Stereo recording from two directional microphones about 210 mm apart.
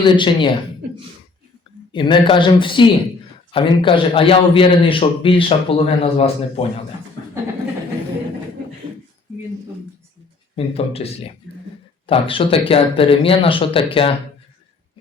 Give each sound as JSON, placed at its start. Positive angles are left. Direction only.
{"t": 0.0, "sound": "a man's voice", "side_deg": 25}
{"t": 1.9, "sound": "a man's voice", "side_deg": 25}
{"t": 10.5, "sound": "a man's voice", "side_deg": 30}